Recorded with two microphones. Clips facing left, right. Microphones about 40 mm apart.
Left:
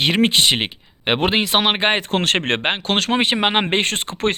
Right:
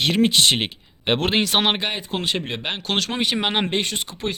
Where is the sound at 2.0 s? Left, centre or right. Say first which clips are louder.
Left 6 dB; left.